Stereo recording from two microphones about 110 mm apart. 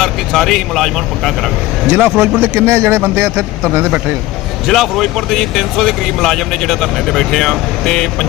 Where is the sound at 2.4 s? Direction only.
25° right (ahead or behind).